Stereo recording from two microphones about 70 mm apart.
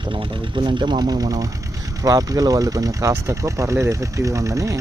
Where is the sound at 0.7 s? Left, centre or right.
Right.